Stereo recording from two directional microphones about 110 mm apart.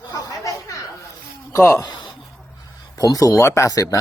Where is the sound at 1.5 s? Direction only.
25° left (ahead or behind).